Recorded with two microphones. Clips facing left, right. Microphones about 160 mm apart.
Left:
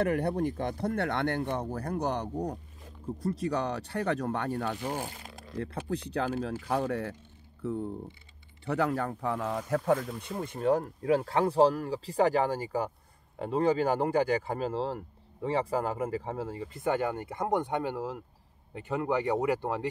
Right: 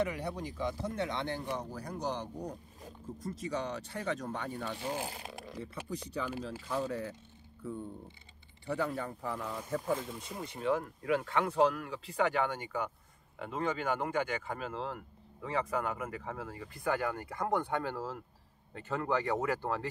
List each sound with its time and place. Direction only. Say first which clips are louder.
0.0 s speech: left 7 dB; 55° left (ahead or behind)
5.6 s speech: left 8 dB; 80° left; by 19.9 s 20° left (ahead or behind)